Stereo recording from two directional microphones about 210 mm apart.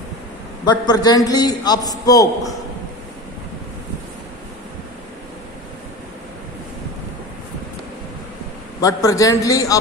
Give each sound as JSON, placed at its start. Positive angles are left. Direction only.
{"t": 0.6, "sound": "a man's voice", "side_deg": 20}
{"t": 8.8, "sound": "a man's voice", "side_deg": 15}